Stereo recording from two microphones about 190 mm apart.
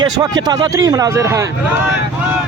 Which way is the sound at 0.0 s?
20° right (ahead or behind).